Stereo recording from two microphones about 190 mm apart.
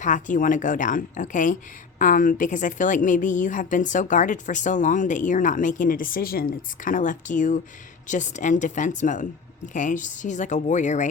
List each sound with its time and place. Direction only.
0.0 s a woman's voice: 40° left (ahead or behind)